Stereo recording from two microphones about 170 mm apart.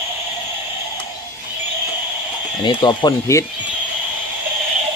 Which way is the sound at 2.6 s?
25° left (ahead or behind).